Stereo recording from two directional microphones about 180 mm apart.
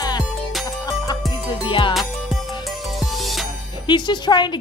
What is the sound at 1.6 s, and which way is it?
Music, 25° left (ahead or behind).